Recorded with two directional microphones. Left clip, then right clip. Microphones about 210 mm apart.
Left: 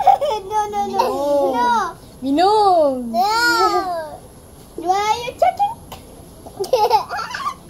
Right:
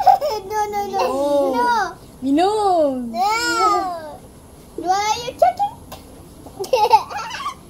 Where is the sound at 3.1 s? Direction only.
15° left (ahead or behind).